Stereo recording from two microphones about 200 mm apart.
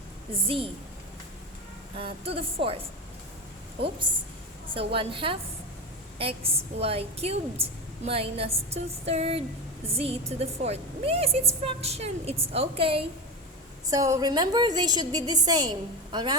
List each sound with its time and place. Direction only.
0.4 s a woman's voice: 25° right (ahead or behind)
2.0 s a woman's voice: 30° right (ahead or behind)
4.7 s a woman's voice: 25° right (ahead or behind)
13.9 s a woman's voice: 15° right (ahead or behind)